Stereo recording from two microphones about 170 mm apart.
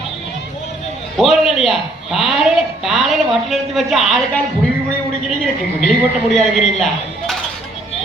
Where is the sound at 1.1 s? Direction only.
Centre (ahead or behind).